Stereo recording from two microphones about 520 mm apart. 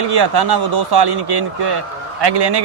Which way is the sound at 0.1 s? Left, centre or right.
Right.